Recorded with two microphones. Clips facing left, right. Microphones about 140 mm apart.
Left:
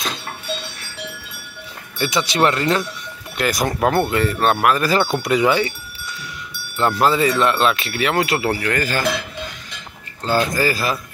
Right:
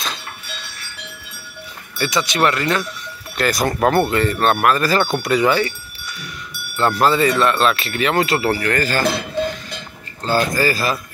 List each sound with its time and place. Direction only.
2.0 s speech: 25° left (ahead or behind)
3.3 s speech: 15° left (ahead or behind)
3.6 s speech: centre (ahead or behind)
6.8 s speech: 10° left (ahead or behind)
10.2 s speech: 20° left (ahead or behind)